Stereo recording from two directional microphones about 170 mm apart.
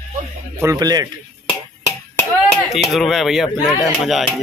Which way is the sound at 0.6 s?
20° right (ahead or behind).